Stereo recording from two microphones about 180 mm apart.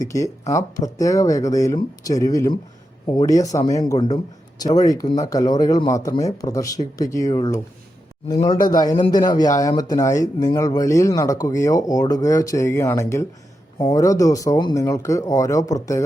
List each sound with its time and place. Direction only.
0.0 s speech: 15° left (ahead or behind)
8.6 s speech: 20° left (ahead or behind)